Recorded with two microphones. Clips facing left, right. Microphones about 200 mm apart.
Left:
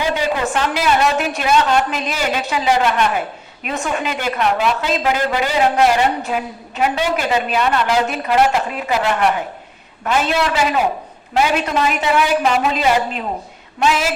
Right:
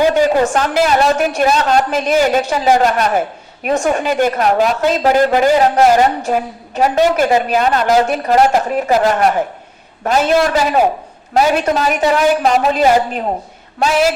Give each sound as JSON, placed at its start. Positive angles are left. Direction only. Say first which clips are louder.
{"t": 0.0, "sound": "a woman's voice", "louder": "right 7 dB", "side_deg": -45}